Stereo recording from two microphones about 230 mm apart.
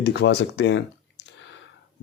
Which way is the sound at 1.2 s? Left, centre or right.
Left.